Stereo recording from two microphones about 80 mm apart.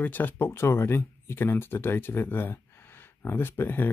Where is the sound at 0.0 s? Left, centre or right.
Left.